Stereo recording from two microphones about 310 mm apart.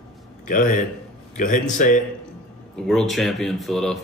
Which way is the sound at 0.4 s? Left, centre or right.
Left.